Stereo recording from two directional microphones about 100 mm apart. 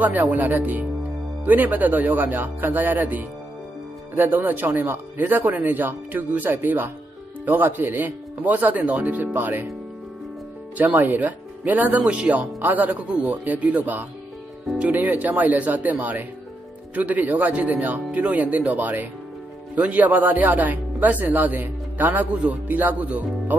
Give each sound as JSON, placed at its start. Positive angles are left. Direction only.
{"t": 0.0, "sound": "speech", "side_deg": -15}
{"t": 10.8, "sound": "speech", "side_deg": -15}